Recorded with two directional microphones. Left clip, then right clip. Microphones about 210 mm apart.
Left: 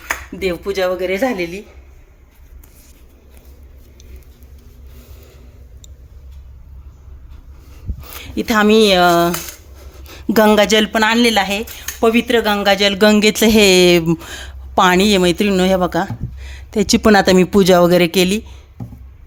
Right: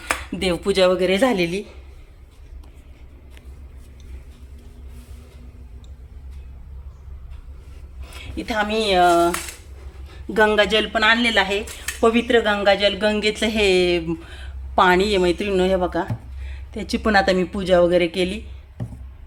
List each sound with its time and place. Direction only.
0.1 s speech: 10° right (ahead or behind)
8.0 s speech: 45° left (ahead or behind)